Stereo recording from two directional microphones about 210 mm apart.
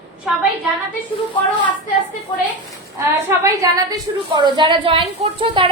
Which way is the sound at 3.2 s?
15° right (ahead or behind).